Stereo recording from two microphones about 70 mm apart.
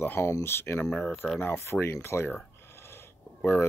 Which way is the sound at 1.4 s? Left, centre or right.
Left.